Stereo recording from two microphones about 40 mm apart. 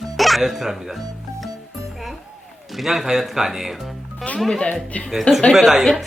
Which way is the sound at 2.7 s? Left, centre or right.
Centre.